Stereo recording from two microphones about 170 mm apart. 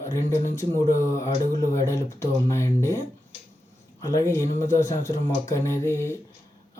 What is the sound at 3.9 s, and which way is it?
Speech, 20° left (ahead or behind).